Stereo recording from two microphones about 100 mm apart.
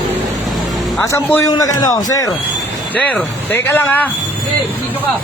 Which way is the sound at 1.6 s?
40° left (ahead or behind).